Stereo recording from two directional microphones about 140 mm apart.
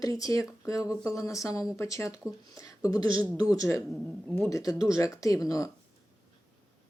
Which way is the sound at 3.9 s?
Centre (ahead or behind).